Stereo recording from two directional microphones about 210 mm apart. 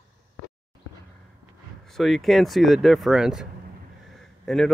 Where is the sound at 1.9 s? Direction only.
Centre (ahead or behind).